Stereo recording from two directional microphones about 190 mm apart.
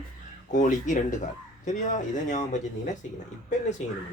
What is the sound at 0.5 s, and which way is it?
Speech, 40° left (ahead or behind).